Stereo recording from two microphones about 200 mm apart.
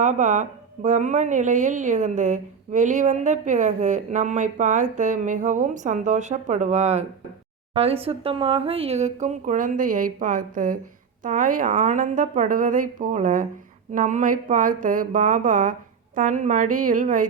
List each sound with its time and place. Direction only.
0.0 s a woman's voice: 40° right (ahead or behind)